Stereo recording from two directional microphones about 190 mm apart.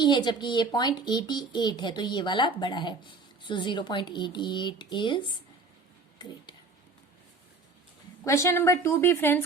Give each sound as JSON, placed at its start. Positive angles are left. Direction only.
{"t": 0.0, "sound": "speech", "side_deg": 25}
{"t": 8.2, "sound": "a woman's voice", "side_deg": 15}